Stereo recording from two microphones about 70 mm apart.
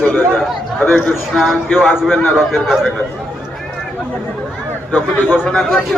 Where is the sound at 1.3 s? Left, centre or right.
Centre.